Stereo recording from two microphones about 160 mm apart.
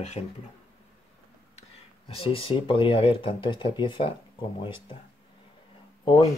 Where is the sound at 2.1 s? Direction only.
35° left (ahead or behind).